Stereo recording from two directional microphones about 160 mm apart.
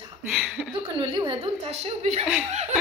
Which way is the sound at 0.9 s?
30° right (ahead or behind).